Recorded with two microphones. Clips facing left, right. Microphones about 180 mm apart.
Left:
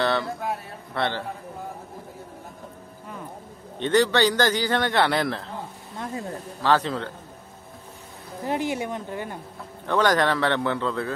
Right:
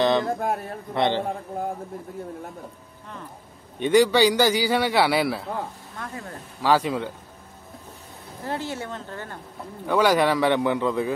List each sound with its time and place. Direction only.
0.0 s a sound: 20° right (ahead or behind)
0.3 s speech: 50° right (ahead or behind)
0.9 s a man's voice: 20° right (ahead or behind)
3.8 s a man's voice: 10° right (ahead or behind)
5.9 s speech: 20° left (ahead or behind)
6.6 s a man's voice: 10° right (ahead or behind)
8.5 s speech: 15° left (ahead or behind)
9.8 s a man's voice: 10° right (ahead or behind)